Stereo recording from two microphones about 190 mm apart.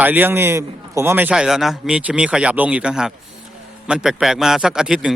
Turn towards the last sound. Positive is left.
turn(degrees=-5)  # may be behind; listen again after turning